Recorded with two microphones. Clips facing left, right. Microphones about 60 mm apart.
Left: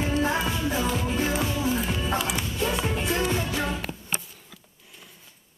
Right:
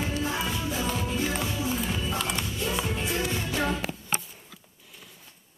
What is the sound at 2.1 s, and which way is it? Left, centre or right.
Music, centre.